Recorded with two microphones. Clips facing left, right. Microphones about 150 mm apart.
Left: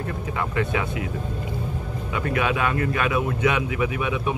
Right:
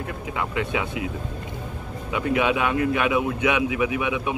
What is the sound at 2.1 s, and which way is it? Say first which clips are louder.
Speech: right 2 dB; 15° right (ahead or behind).